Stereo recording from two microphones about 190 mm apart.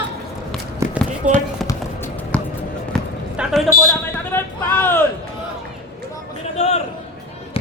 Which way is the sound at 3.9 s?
10° left (ahead or behind).